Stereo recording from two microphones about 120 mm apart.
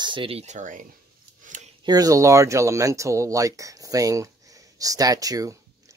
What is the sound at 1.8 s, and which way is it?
Speech, 30° right (ahead or behind).